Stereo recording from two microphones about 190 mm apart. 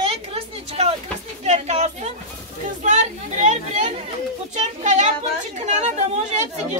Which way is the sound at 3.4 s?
35° right (ahead or behind).